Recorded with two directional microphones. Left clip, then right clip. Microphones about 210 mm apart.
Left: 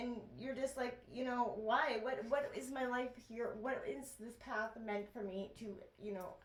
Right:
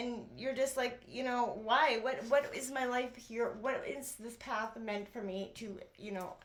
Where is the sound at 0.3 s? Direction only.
30° right (ahead or behind).